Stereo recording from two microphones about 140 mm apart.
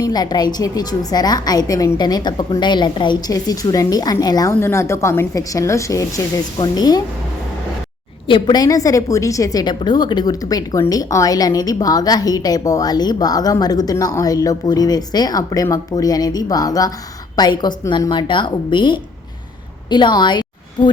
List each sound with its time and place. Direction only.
0.0 s a woman's voice: 30° left (ahead or behind)
8.3 s a woman's voice: 30° left (ahead or behind)